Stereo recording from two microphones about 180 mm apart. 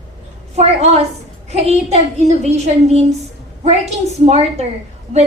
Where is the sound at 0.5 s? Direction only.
35° right (ahead or behind).